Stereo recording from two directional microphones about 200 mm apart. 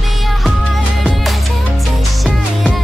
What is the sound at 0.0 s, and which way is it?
Music, centre (ahead or behind).